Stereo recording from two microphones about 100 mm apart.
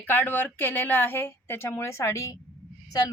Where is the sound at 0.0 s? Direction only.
20° left (ahead or behind).